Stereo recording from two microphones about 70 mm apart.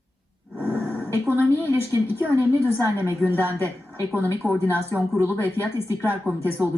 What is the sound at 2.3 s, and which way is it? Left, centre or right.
Speech, right.